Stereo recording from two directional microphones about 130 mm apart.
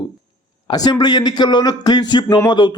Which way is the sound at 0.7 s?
35° left (ahead or behind).